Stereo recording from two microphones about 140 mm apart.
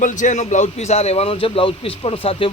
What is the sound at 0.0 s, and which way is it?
A man's voice, 60° left (ahead or behind).